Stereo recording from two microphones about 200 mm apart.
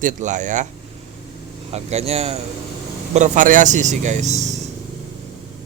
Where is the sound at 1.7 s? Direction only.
35° right (ahead or behind).